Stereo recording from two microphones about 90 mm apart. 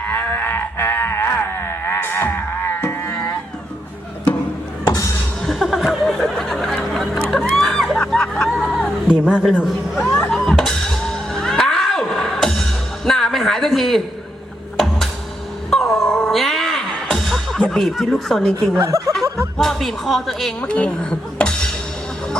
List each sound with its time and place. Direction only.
0.0 s a sound: 15° left (ahead or behind)
2.8 s music: 25° left (ahead or behind)
4.9 s music: 40° left (ahead or behind)
5.5 s a sound: centre (ahead or behind)
9.2 s a man's voice: 10° right (ahead or behind)
10.2 s music: 10° left (ahead or behind)
18.9 s speech: 35° right (ahead or behind)
19.5 s a woman's voice: centre (ahead or behind)
20.6 s chink: 15° left (ahead or behind)